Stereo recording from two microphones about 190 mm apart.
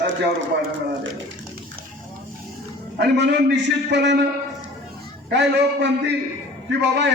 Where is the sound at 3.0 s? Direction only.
65° right (ahead or behind).